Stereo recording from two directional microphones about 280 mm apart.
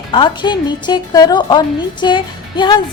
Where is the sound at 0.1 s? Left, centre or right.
Centre.